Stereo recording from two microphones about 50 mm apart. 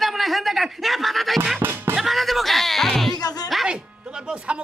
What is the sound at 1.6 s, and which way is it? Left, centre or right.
Music, right.